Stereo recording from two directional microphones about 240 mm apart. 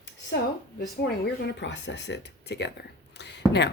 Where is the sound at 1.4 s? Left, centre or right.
Left.